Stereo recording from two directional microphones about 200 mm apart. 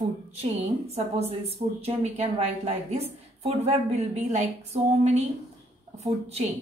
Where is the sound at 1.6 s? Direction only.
30° right (ahead or behind).